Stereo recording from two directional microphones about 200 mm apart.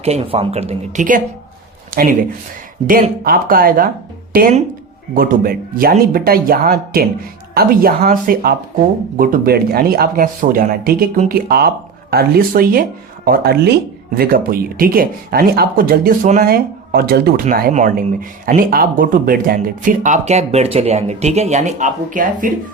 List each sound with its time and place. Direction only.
0.0 s speech: 30° right (ahead or behind); by 17.4 s 50° right (ahead or behind)
17.4 s speech: 40° right (ahead or behind)